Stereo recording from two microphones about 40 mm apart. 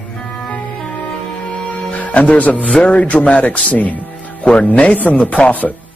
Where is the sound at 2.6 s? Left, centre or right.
Left.